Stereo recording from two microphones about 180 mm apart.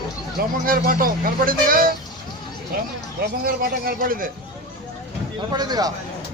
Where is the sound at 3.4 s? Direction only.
55° right (ahead or behind).